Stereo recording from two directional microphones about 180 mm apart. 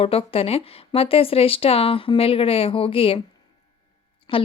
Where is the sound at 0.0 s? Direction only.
30° left (ahead or behind).